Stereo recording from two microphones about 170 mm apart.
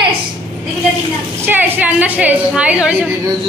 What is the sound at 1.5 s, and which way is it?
A woman's voice, 10° right (ahead or behind).